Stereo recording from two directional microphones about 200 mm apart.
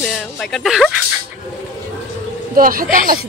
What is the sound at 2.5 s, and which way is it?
Speech, 45° right (ahead or behind).